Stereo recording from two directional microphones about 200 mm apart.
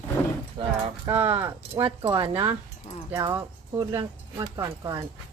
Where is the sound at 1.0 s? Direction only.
10° right (ahead or behind).